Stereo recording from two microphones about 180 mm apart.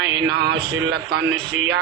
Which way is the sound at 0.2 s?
65° right (ahead or behind).